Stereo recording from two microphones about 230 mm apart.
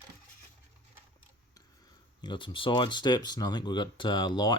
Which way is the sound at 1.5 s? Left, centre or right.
Centre.